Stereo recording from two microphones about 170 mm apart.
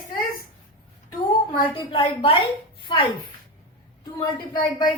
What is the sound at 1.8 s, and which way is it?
A woman's voice, 30° left (ahead or behind).